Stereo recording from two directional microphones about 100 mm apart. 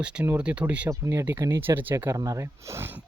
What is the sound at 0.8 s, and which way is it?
Speech, 30° right (ahead or behind).